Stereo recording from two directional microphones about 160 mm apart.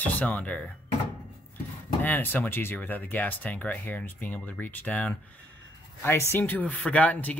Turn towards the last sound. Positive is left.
turn(degrees=10)  # may be behind; listen again after turning